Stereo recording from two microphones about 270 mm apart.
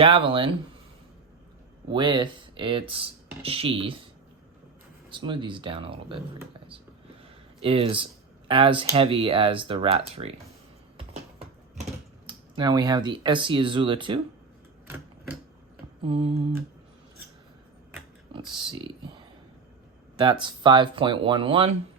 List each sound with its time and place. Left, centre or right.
0.0 s speech: centre
1.9 s speech: centre
5.1 s speech: centre
12.2 s speech: centre
14.8 s typewriter: centre
16.0 s speech: right
18.3 s speech: centre